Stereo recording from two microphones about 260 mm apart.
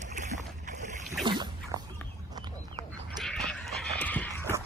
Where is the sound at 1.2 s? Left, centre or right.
Centre.